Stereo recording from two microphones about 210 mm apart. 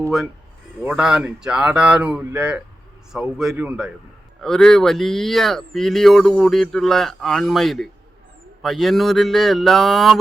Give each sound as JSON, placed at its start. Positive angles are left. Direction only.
{"t": 0.0, "sound": "speech", "side_deg": 0}